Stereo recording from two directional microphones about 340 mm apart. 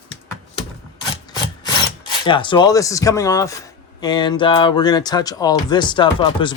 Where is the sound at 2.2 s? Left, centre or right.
Centre.